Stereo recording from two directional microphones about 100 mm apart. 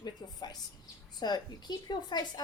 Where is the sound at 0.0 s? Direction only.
45° left (ahead or behind).